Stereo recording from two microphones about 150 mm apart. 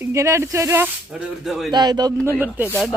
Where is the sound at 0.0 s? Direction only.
20° right (ahead or behind).